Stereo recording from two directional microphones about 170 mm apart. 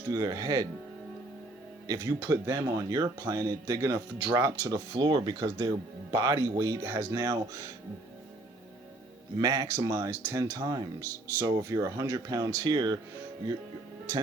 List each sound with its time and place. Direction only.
0.1 s speech: 20° right (ahead or behind)
1.9 s speech: 15° right (ahead or behind)
9.4 s speech: 20° right (ahead or behind)